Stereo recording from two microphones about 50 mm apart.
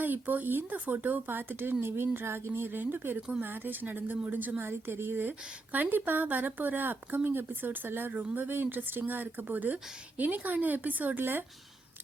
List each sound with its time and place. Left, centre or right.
0.0 s a woman's voice: right
4.6 s a woman's voice: right